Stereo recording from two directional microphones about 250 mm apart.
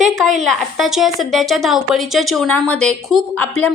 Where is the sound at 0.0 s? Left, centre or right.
Centre.